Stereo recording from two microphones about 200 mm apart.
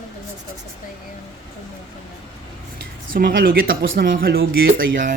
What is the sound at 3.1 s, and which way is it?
Speech, 50° right (ahead or behind).